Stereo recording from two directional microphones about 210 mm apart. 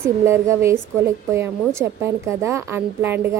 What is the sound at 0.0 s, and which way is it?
A woman's voice, 10° right (ahead or behind).